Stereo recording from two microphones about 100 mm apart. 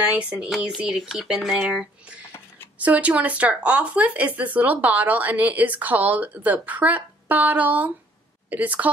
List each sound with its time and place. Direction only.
0.1 s speech: 10° right (ahead or behind)